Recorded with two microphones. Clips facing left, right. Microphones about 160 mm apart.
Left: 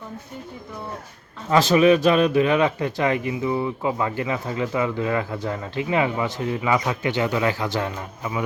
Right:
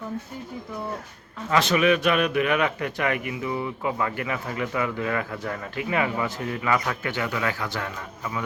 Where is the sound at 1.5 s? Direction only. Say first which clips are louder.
Left 5 dB; 30° left (ahead or behind).